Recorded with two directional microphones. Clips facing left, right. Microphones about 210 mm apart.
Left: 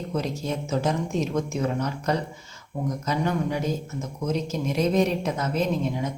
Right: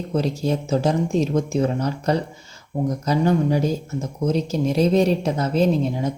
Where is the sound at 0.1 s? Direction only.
35° right (ahead or behind).